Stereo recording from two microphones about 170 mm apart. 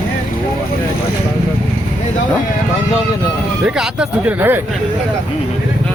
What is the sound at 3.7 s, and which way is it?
Speech, 5° right (ahead or behind).